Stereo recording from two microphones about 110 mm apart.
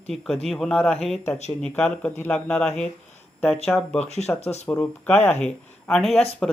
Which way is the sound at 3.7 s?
5° left (ahead or behind).